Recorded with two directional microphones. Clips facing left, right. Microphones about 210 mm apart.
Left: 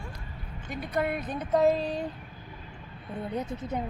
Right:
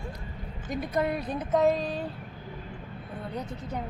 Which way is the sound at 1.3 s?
Centre (ahead or behind).